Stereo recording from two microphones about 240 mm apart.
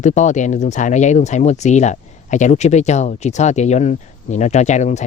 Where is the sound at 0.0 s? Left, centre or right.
Left.